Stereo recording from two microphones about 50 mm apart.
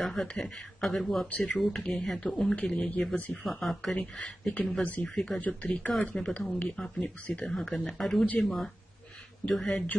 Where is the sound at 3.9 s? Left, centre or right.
Left; by 9.8 s centre.